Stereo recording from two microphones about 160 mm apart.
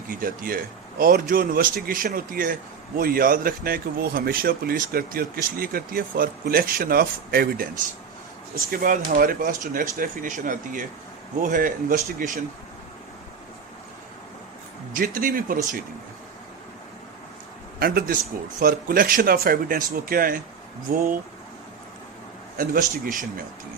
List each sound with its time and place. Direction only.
0.1 s speech: 60° right (ahead or behind)
14.9 s speech: 60° right (ahead or behind)
17.7 s a man's voice: 70° right (ahead or behind)
22.5 s speech: 60° right (ahead or behind)